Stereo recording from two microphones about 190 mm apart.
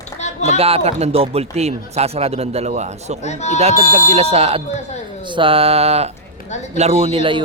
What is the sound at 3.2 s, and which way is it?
Speech, 35° left (ahead or behind).